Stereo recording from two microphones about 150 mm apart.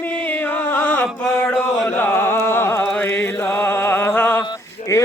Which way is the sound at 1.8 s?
15° left (ahead or behind).